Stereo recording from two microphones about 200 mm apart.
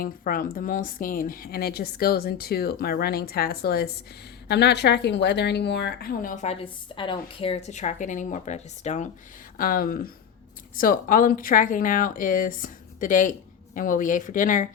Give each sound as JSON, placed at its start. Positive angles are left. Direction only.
{"t": 0.0, "sound": "a woman's voice", "side_deg": 45}
{"t": 9.6, "sound": "a woman's voice", "side_deg": 45}